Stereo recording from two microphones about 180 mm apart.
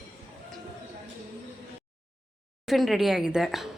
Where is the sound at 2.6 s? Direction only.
Centre (ahead or behind).